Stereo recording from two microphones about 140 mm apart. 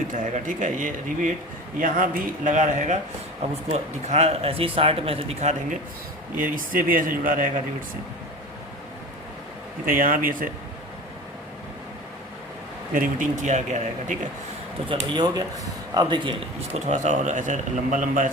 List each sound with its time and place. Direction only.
0.1 s speech: 65° right (ahead or behind)
6.3 s speech: 80° right
9.8 s speech: 90° right
12.9 s a man's voice: 70° right (ahead or behind)
14.8 s speech: 30° right (ahead or behind)
16.6 s a man's voice: 55° right (ahead or behind); by 18.3 s 70° right (ahead or behind)